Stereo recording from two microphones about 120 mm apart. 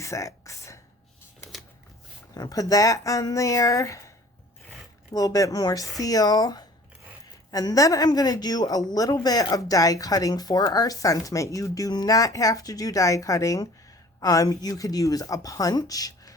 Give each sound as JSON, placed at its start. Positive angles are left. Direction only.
{"t": 0.0, "sound": "a sound", "side_deg": 25}
{"t": 2.3, "sound": "speech", "side_deg": 30}
{"t": 5.1, "sound": "a woman's voice", "side_deg": 30}